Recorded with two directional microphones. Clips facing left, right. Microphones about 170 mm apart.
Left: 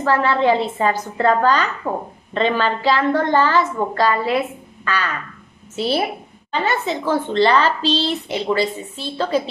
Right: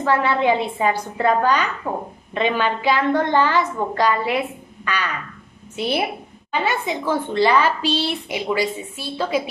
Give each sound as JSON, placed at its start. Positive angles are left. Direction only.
{"t": 0.1, "sound": "a woman's voice", "side_deg": -15}
{"t": 4.8, "sound": "frog", "side_deg": -15}
{"t": 5.8, "sound": "a woman's voice", "side_deg": -15}